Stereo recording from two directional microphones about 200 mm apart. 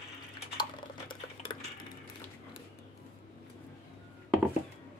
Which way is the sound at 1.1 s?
25° left (ahead or behind).